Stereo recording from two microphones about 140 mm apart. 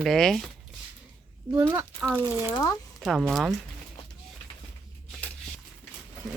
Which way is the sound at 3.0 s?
5° right (ahead or behind).